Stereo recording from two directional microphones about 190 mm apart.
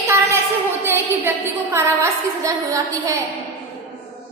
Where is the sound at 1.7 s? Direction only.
15° right (ahead or behind).